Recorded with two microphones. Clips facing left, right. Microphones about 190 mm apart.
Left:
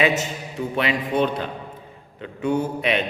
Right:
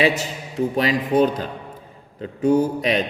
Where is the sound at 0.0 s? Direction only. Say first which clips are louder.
Right 1 dB; 35° right (ahead or behind).